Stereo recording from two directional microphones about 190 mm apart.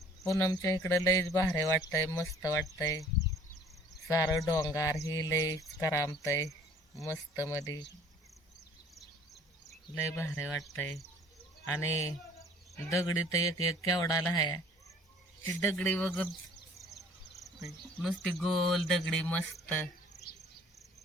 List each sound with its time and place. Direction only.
0.3 s speech: 15° left (ahead or behind)
10.2 s speech: 15° left (ahead or behind)
15.4 s speech: 10° left (ahead or behind)